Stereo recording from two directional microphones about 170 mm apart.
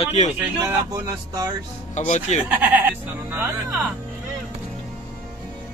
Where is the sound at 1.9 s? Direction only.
45° left (ahead or behind).